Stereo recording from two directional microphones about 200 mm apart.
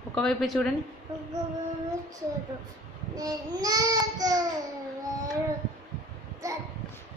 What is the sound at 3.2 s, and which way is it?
Child singing, 20° right (ahead or behind).